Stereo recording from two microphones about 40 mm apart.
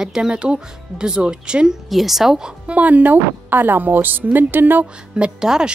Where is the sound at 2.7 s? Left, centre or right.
Right.